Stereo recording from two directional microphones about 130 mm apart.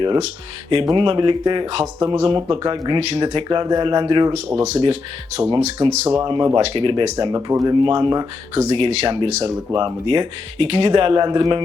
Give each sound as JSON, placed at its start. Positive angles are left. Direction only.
{"t": 0.7, "sound": "speech", "side_deg": -40}
{"t": 2.0, "sound": "speech", "side_deg": -25}
{"t": 2.2, "sound": "speech", "side_deg": -40}
{"t": 4.6, "sound": "speech", "side_deg": -55}
{"t": 6.2, "sound": "speech", "side_deg": -35}
{"t": 7.3, "sound": "speech", "side_deg": -25}
{"t": 9.7, "sound": "speech", "side_deg": -40}